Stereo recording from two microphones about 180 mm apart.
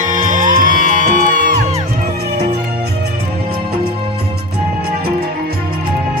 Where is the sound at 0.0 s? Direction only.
45° right (ahead or behind).